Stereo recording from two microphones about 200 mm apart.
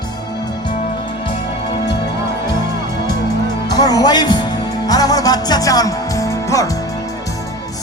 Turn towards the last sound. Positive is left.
turn(degrees=15)  # may be behind; listen again after turning